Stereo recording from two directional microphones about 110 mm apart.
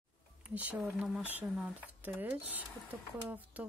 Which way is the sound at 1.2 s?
15° right (ahead or behind).